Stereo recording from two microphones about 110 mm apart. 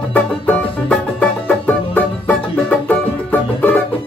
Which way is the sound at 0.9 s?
15° left (ahead or behind).